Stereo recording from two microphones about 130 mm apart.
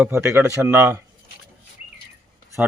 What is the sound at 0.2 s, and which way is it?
Speech, 15° right (ahead or behind).